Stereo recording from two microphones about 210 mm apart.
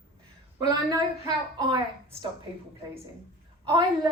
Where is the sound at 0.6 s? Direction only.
15° right (ahead or behind).